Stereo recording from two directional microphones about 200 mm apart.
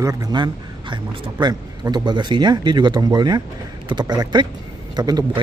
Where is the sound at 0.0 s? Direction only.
15° right (ahead or behind).